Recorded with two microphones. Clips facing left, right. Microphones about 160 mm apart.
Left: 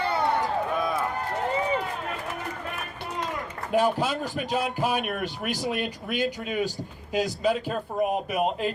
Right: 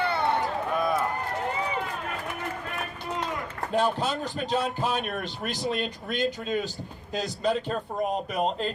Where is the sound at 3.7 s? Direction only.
10° left (ahead or behind).